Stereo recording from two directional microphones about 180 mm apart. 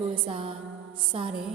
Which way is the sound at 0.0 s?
30° right (ahead or behind).